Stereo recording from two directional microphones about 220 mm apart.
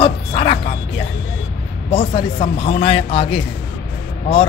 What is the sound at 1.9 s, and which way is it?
A man's voice, 25° left (ahead or behind).